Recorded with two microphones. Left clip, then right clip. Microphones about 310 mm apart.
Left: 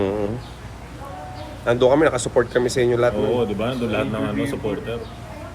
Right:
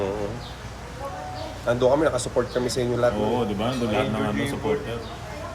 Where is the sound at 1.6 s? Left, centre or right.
Left.